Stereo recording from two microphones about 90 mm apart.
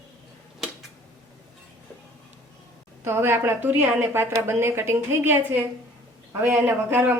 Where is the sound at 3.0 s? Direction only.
30° right (ahead or behind).